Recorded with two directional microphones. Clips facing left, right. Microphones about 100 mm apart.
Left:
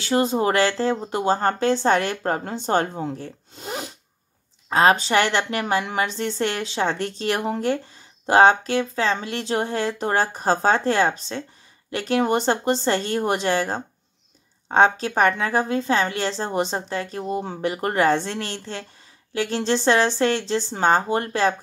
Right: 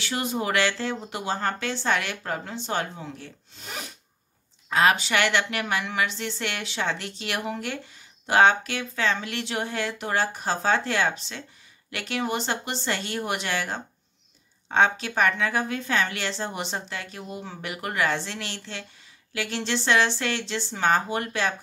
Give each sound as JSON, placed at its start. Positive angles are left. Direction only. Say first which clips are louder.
{"t": 0.0, "sound": "a woman's voice", "louder": "left 8 dB", "side_deg": 35}